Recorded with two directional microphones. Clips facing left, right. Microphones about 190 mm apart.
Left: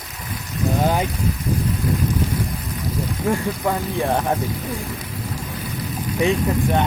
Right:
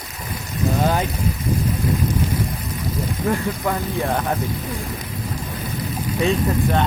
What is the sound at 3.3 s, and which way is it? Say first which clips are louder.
Speech: left 1 dB; 15° left (ahead or behind).